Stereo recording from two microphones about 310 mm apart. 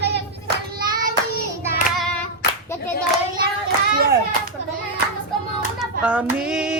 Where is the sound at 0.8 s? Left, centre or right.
Right.